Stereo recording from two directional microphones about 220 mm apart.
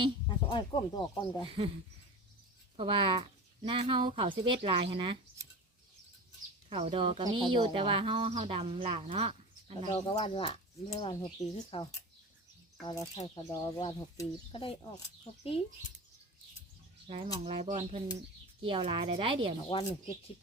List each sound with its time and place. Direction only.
0.3 s speech: 20° left (ahead or behind)
1.5 s speech: 25° right (ahead or behind)
2.7 s speech: 25° right (ahead or behind)
6.7 s speech: 25° right (ahead or behind)
9.9 s speech: 25° left (ahead or behind)
17.1 s speech: 25° right (ahead or behind)
19.7 s speech: 25° left (ahead or behind)